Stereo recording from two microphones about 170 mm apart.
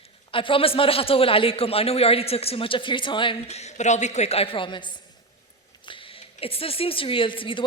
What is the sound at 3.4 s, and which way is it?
A woman's voice, 40° left (ahead or behind).